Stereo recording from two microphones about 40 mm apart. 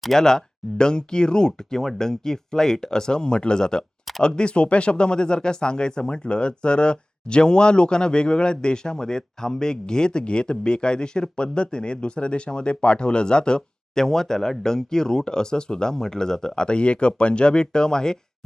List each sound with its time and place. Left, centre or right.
0.2 s speech: centre